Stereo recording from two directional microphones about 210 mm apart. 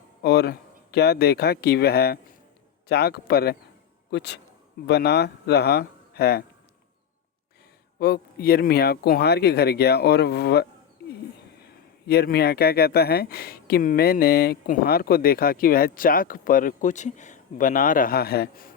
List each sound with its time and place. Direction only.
0.2 s speech: 50° left (ahead or behind)
7.9 s speech: 50° left (ahead or behind)
12.0 s speech: 50° left (ahead or behind)